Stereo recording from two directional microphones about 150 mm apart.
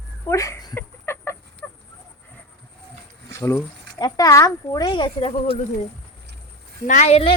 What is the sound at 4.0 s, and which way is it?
Speech, 25° left (ahead or behind).